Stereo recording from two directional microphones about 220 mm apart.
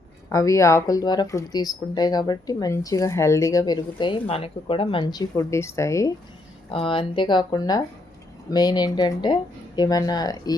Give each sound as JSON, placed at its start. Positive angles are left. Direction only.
{"t": 0.3, "sound": "speech", "side_deg": 15}
{"t": 6.7, "sound": "speech", "side_deg": 25}